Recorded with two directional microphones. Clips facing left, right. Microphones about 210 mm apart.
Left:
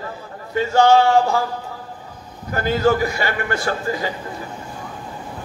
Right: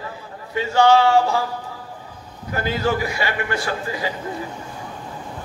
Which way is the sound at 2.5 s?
45° left (ahead or behind).